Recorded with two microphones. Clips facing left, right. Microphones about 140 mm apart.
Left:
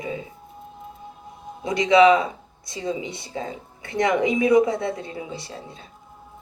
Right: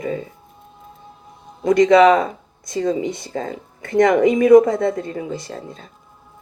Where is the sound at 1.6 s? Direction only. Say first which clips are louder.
Right 4 dB; 50° right (ahead or behind).